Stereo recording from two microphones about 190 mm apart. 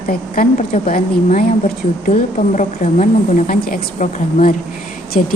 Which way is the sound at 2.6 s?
40° left (ahead or behind).